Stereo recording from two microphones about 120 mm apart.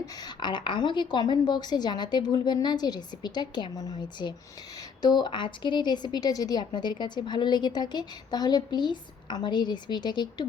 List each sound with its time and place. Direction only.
0.0 s a woman's voice: 35° left (ahead or behind)